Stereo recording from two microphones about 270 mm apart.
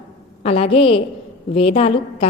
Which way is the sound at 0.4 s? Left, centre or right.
Left.